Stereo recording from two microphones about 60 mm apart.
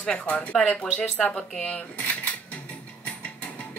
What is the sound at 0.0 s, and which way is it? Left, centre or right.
Speech, centre.